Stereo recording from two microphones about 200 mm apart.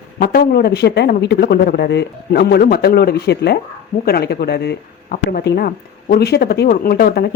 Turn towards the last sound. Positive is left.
turn(degrees=50)  # may be behind; listen again after turning